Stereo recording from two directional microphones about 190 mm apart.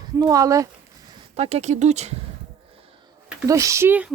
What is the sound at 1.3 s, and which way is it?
Speech, 35° right (ahead or behind).